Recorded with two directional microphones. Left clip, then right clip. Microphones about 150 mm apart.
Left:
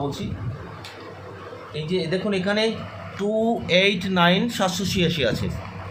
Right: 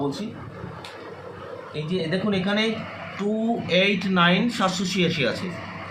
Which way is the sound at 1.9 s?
65° left (ahead or behind).